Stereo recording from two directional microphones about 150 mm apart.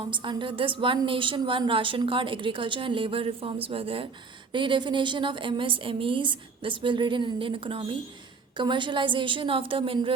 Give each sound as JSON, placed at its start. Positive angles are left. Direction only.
{"t": 0.0, "sound": "a woman's voice", "side_deg": -30}